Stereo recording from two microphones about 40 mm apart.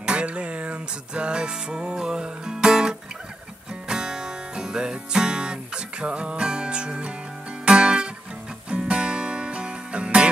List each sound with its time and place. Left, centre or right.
0.0 s music: right